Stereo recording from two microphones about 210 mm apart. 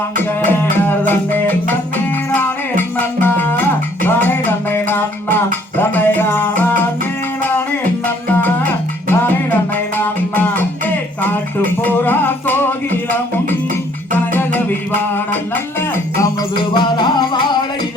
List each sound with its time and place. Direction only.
0.4 s music: 10° left (ahead or behind)
8.0 s music: 10° left (ahead or behind)
14.1 s music: 10° left (ahead or behind)
16.7 s music: 20° left (ahead or behind)